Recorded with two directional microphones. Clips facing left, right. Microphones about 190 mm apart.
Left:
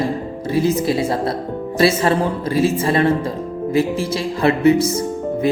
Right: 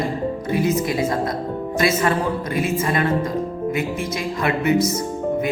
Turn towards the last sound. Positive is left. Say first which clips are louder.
# left 5 dB
turn(degrees=30)  # may be behind; listen again after turning